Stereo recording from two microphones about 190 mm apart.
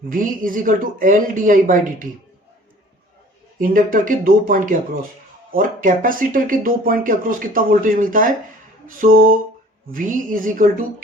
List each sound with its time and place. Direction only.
0.1 s speech: 45° right (ahead or behind)
3.6 s speech: 45° right (ahead or behind)